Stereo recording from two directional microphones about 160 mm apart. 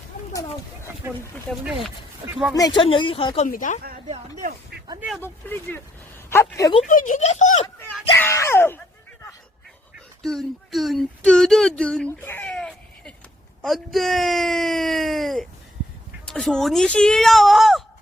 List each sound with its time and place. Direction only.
2.6 s speech: 25° left (ahead or behind)
3.4 s speech: 55° left (ahead or behind)
4.9 s speech: 5° right (ahead or behind)
5.2 s speech: 15° left (ahead or behind)
6.8 s speech: 55° left (ahead or behind)
8.2 s speech: 15° left (ahead or behind)
10.2 s speech: centre (ahead or behind)